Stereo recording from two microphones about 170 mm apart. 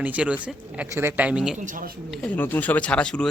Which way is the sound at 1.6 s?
50° right (ahead or behind).